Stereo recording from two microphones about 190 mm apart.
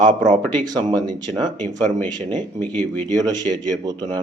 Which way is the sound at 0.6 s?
20° right (ahead or behind).